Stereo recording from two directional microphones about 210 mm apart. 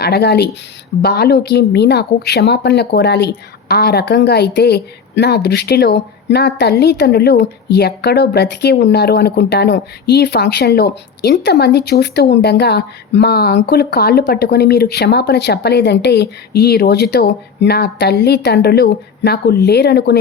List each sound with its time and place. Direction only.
0.0 s speech: 50° left (ahead or behind)